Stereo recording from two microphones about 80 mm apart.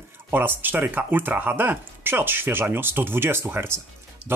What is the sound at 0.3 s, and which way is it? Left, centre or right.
Speech, right.